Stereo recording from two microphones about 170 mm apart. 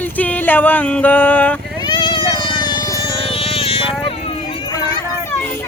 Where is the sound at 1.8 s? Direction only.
25° left (ahead or behind).